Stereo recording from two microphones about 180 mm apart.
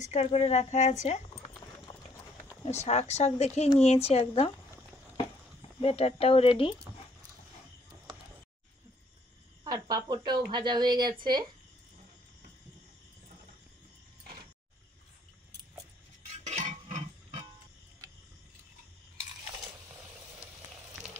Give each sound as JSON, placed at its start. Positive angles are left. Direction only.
{"t": 0.0, "sound": "speech", "side_deg": 35}
{"t": 2.6, "sound": "speech", "side_deg": 40}
{"t": 5.8, "sound": "speech", "side_deg": 35}
{"t": 9.7, "sound": "speech", "side_deg": -20}
{"t": 16.4, "sound": "a sound", "side_deg": -40}